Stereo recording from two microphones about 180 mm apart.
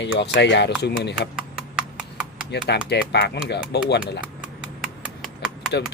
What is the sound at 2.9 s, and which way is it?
Speech, 65° left (ahead or behind).